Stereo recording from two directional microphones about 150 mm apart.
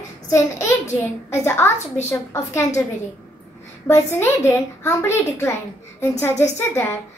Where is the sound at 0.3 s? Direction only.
20° left (ahead or behind).